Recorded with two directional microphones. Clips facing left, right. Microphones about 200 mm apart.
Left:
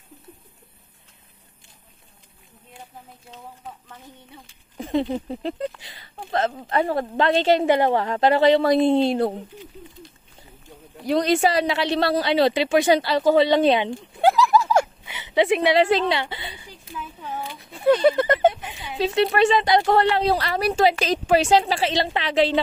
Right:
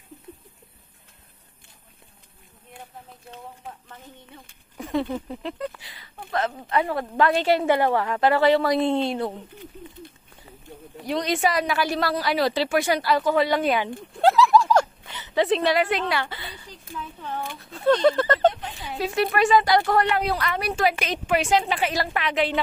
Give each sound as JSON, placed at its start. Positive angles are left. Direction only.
{"t": 4.7, "sound": "speech", "side_deg": 25}
{"t": 11.1, "sound": "speech", "side_deg": 35}
{"t": 14.1, "sound": "a sound", "side_deg": 0}
{"t": 15.1, "sound": "speech", "side_deg": 15}
{"t": 15.7, "sound": "a woman's voice", "side_deg": 30}
{"t": 16.9, "sound": "a sound", "side_deg": 5}
{"t": 18.9, "sound": "speech", "side_deg": 25}